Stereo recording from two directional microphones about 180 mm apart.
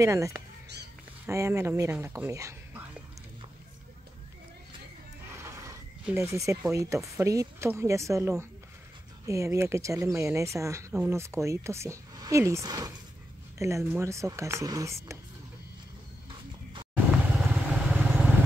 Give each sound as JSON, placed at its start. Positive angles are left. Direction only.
{"t": 0.0, "sound": "speech", "side_deg": -15}
{"t": 5.4, "sound": "a sound", "side_deg": -15}
{"t": 6.7, "sound": "speech", "side_deg": -15}
{"t": 16.9, "sound": "vehicle", "side_deg": -10}